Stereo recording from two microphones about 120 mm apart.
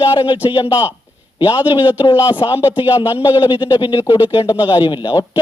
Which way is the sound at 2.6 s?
15° right (ahead or behind).